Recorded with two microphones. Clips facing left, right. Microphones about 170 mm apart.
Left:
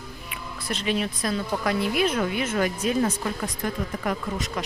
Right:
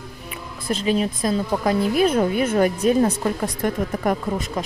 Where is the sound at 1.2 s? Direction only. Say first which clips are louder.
Right 5 dB; 25° right (ahead or behind).